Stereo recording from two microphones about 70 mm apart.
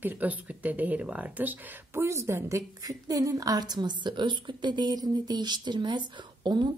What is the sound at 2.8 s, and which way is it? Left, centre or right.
A woman's voice, right.